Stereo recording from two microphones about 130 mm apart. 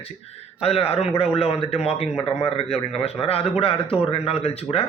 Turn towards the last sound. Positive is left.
turn(degrees=50)  # may be behind; listen again after turning